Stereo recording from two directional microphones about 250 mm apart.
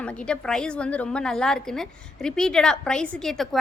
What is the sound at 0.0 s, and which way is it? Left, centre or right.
A woman's voice, centre.